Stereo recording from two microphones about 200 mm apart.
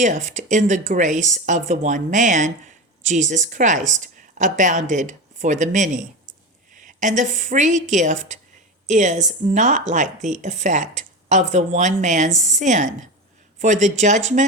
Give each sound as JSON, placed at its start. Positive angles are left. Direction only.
{"t": 0.0, "sound": "speech", "side_deg": -35}